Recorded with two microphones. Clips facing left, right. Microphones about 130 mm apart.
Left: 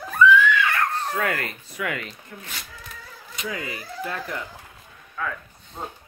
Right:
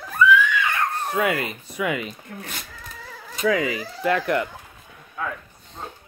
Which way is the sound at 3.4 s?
90° right.